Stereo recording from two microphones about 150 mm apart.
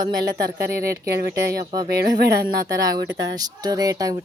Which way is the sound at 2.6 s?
25° right (ahead or behind).